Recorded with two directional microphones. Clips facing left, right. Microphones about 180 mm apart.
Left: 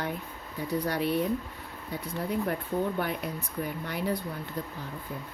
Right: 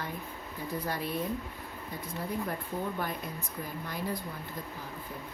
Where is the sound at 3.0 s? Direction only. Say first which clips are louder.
Left 4 dB; 70° left (ahead or behind).